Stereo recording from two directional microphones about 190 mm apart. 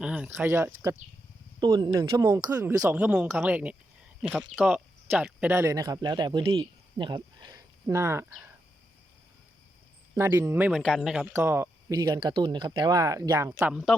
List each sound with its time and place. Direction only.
0.0 s speech: 5° right (ahead or behind)
1.5 s speech: 25° right (ahead or behind)
10.2 s speech: 15° right (ahead or behind)
10.7 s speech: centre (ahead or behind)